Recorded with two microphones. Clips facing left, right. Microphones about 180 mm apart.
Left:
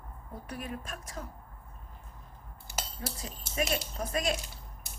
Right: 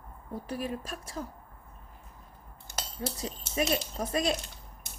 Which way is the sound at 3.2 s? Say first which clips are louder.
Right 3 dB; 25° right (ahead or behind).